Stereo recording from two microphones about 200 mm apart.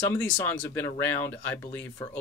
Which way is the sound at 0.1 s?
10° left (ahead or behind).